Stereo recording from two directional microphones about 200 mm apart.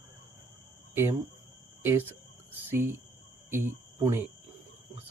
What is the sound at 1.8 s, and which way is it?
Speech, 10° right (ahead or behind).